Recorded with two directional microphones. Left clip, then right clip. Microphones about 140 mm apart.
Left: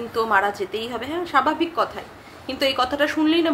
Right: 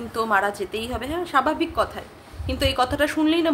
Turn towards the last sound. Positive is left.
turn(degrees=-15)  # may be behind; listen again after turning